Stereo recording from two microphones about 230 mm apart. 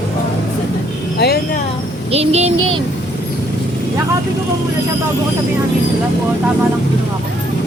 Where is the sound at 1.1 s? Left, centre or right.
Left.